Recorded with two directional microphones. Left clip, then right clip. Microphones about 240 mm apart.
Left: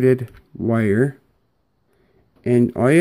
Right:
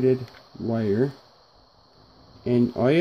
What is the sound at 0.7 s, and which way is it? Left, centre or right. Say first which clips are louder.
Speech: left 5 dB; left.